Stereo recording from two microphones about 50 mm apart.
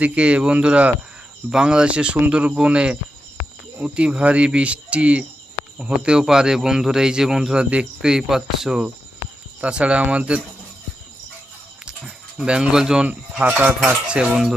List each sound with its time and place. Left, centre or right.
0.0 s a man's voice: right
7.6 s a man's voice: right
9.6 s speech: right
11.9 s a sound: centre
13.4 s a sound: right
14.1 s speech: right